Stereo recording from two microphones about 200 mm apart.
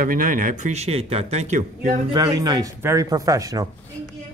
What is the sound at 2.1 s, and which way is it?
Speech, 20° right (ahead or behind).